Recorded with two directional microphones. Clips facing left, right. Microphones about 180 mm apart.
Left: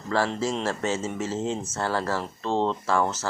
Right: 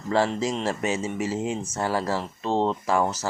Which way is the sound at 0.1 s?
15° right (ahead or behind).